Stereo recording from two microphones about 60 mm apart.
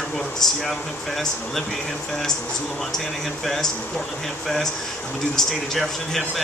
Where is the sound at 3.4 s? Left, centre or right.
Centre.